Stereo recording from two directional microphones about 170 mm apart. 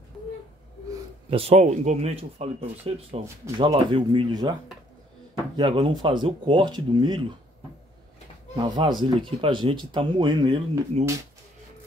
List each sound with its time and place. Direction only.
1.3 s speech: 35° right (ahead or behind)
5.6 s speech: 25° right (ahead or behind)
8.5 s speech: 25° right (ahead or behind)